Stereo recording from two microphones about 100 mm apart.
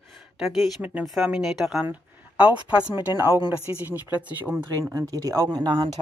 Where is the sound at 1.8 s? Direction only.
15° right (ahead or behind).